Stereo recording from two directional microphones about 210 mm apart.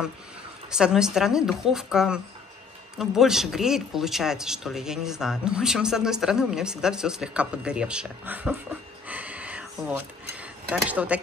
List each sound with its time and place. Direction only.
0.7 s speech: 5° right (ahead or behind)
9.0 s a sound: 5° right (ahead or behind)
10.3 s speech: 5° right (ahead or behind)